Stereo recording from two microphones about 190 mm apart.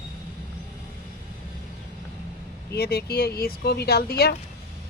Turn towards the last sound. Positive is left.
turn(degrees=60)  # may be behind; listen again after turning